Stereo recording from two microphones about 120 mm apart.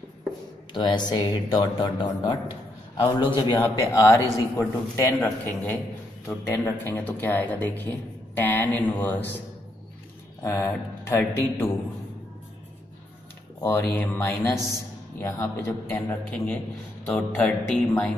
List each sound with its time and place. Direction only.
0.8 s speech: 35° left (ahead or behind)
3.6 s speech: 30° left (ahead or behind)
5.2 s a man's voice: 15° left (ahead or behind)
10.4 s speech: 20° left (ahead or behind)
13.6 s a man's voice: 20° left (ahead or behind)